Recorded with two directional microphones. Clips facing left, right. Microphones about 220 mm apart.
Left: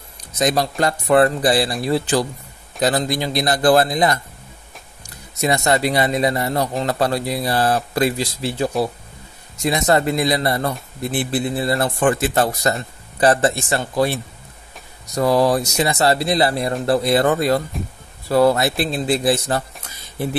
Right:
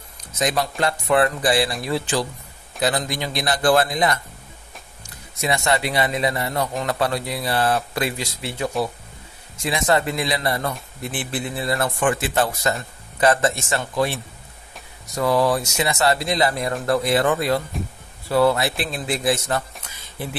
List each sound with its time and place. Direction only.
0.4 s speech: 35° left (ahead or behind)
5.4 s speech: 40° left (ahead or behind)
15.1 s speech: 40° left (ahead or behind)